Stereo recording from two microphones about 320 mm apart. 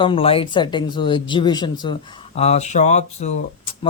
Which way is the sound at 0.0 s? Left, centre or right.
Centre.